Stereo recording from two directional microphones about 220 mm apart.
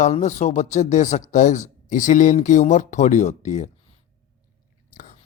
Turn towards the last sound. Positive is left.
turn(degrees=35)  # may be behind; listen again after turning